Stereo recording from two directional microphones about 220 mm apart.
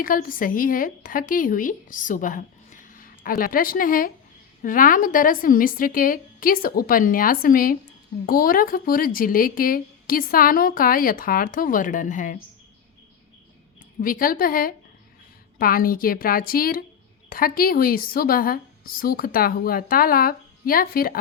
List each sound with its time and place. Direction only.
0.0 s speech: 40° left (ahead or behind)
14.0 s speech: 40° left (ahead or behind)